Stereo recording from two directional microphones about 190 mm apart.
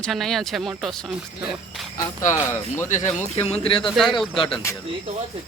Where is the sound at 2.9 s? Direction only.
40° left (ahead or behind).